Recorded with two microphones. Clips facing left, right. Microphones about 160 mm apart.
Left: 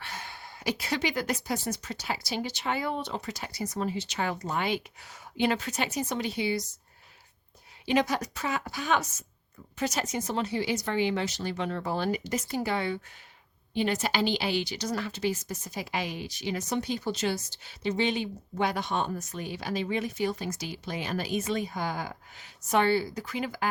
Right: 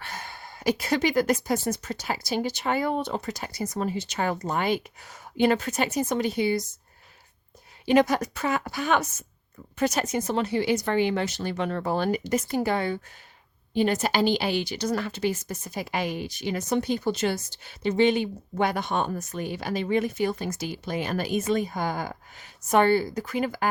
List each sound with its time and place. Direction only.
0.0 s speech: 45° right (ahead or behind)
7.9 s speech: 50° right (ahead or behind)